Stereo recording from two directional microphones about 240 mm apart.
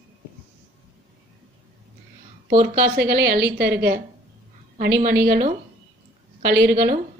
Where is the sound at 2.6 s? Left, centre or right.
Right.